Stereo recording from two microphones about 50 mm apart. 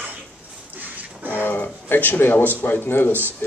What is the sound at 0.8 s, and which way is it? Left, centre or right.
Music, right.